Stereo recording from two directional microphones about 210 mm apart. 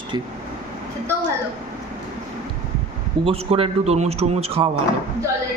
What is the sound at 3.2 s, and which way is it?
A man's voice, 25° right (ahead or behind).